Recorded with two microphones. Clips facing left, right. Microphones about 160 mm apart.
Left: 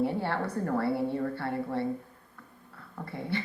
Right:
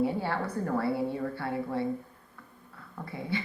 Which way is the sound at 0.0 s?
60° left (ahead or behind).